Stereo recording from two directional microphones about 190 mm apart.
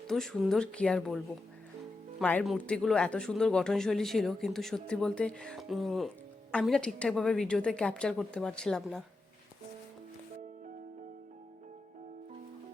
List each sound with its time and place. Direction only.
0.1 s speech: centre (ahead or behind)